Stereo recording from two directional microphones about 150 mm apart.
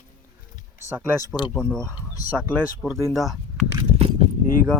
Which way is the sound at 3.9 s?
40° right (ahead or behind).